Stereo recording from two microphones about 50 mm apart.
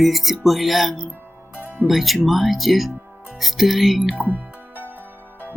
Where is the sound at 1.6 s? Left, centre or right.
Right.